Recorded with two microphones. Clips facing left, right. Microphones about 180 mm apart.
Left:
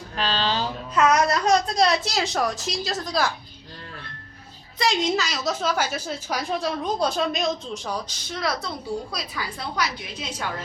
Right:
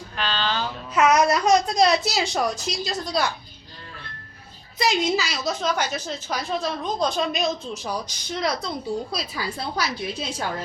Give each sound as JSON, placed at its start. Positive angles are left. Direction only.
{"t": 0.2, "sound": "music", "side_deg": 35}
{"t": 0.9, "sound": "a child's voice", "side_deg": -10}
{"t": 4.8, "sound": "a woman's voice", "side_deg": -5}
{"t": 7.9, "sound": "speech", "side_deg": -10}
{"t": 9.1, "sound": "a woman's voice", "side_deg": -30}